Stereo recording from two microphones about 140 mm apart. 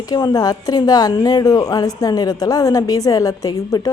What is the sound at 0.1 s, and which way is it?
A woman's voice, 30° left (ahead or behind).